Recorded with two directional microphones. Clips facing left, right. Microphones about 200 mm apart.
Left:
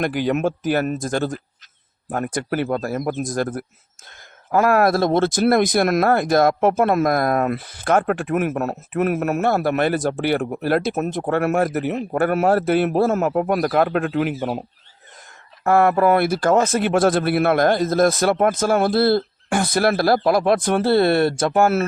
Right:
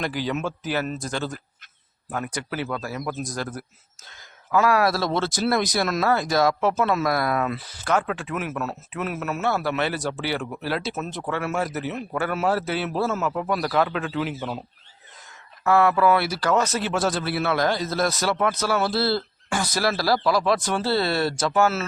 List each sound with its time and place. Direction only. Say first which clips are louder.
0.0 s speech: left 7 dB; 55° left (ahead or behind)
15.6 s speech: left 3 dB; 50° left (ahead or behind)